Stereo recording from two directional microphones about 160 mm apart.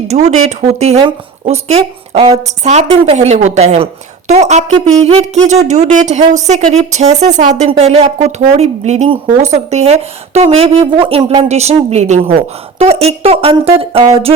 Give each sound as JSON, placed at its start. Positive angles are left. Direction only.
{"t": 0.1, "sound": "speech", "side_deg": -45}
{"t": 2.2, "sound": "a woman's voice", "side_deg": -25}
{"t": 2.6, "sound": "speech", "side_deg": -45}